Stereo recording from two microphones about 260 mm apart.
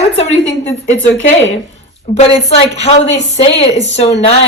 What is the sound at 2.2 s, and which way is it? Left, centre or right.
A woman's voice, left.